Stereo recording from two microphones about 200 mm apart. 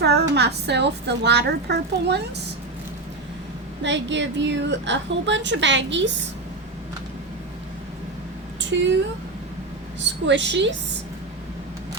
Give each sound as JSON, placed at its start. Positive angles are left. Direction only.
{"t": 0.0, "sound": "a woman's voice", "side_deg": -55}
{"t": 3.8, "sound": "a woman's voice", "side_deg": -65}
{"t": 8.7, "sound": "a woman's voice", "side_deg": -65}
{"t": 10.0, "sound": "a woman's voice", "side_deg": -65}